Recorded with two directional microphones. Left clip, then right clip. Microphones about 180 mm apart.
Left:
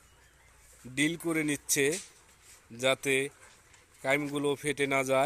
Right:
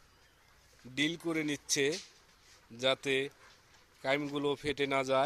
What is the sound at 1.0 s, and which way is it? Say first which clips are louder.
Speech: left 3 dB; centre (ahead or behind).